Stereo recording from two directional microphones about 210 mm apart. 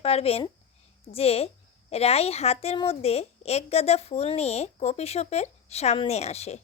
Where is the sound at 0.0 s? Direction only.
30° left (ahead or behind).